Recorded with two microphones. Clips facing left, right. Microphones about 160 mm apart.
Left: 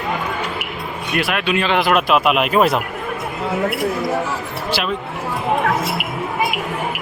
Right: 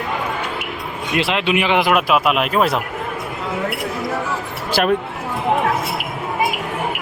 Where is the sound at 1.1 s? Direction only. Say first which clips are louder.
Right 1 dB; 20° right (ahead or behind).